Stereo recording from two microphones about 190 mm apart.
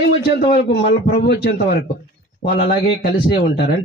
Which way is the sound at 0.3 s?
60° left (ahead or behind).